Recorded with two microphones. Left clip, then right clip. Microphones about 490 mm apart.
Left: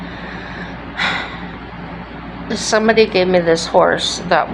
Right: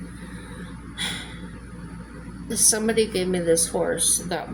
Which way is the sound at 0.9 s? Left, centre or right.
Right.